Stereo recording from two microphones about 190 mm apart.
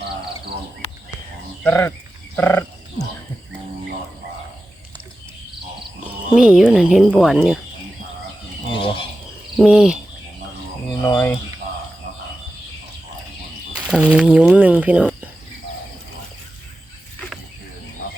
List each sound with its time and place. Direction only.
1.6 s speech: 10° left (ahead or behind)
2.3 s frog: 10° left (ahead or behind)
6.3 s a woman's voice: 5° right (ahead or behind)
8.7 s a sound: 30° left (ahead or behind)
9.6 s a woman's voice: 5° right (ahead or behind)
11.0 s frog: 15° left (ahead or behind)
13.7 s speech: 5° right (ahead or behind)